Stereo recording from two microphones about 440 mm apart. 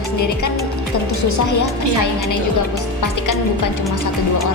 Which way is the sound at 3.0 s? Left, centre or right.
Left.